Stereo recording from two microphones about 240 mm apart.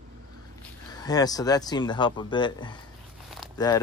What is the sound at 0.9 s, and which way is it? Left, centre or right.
Speech, centre.